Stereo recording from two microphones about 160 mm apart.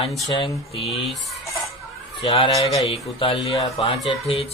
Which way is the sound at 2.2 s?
40° left (ahead or behind).